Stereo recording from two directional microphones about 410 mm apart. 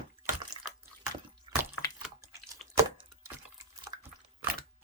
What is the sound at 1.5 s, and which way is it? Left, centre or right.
Drip, centre.